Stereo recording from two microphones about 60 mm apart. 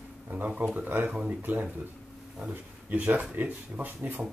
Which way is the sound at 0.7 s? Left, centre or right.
Right.